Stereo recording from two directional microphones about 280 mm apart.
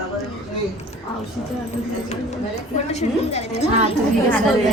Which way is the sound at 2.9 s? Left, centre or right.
Left.